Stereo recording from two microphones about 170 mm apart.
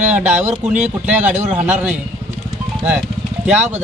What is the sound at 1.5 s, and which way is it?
Speech, 10° right (ahead or behind).